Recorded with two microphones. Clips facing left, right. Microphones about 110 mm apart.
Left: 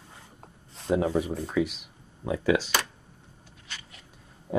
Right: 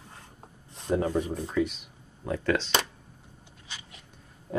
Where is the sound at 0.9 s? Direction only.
10° left (ahead or behind).